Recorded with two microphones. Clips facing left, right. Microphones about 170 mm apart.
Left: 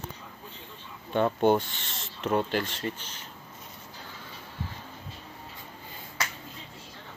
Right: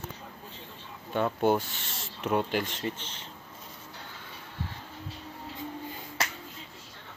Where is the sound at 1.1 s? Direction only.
5° right (ahead or behind); by 3.3 s 25° right (ahead or behind).